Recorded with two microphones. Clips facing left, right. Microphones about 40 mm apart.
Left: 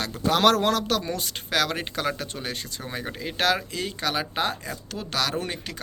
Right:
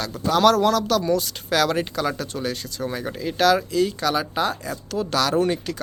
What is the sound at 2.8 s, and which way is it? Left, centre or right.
Speech, centre.